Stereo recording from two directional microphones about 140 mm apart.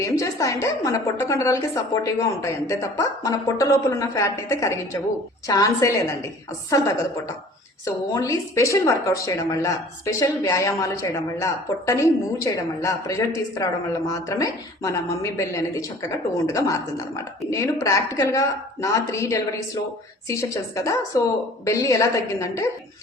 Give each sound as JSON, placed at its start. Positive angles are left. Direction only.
{"t": 0.0, "sound": "a woman's voice", "side_deg": 25}